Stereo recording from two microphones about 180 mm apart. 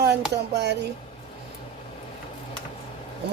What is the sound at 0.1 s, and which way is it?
Speech, 70° right (ahead or behind).